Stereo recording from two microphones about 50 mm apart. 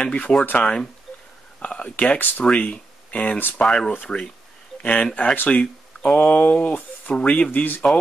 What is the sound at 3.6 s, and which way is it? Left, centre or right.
Speech, centre.